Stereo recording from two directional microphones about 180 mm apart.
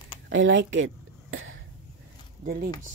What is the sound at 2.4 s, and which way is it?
Speech, 55° right (ahead or behind).